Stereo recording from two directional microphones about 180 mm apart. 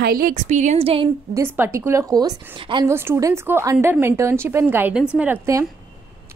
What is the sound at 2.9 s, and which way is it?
A woman's voice, 15° right (ahead or behind).